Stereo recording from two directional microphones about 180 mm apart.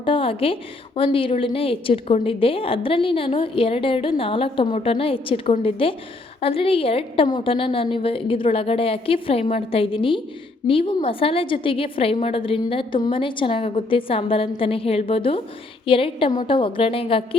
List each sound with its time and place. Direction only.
0.0 s a woman's voice: 30° left (ahead or behind)